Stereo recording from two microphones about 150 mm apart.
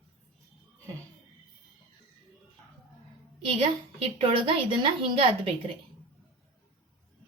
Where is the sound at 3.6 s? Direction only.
40° right (ahead or behind).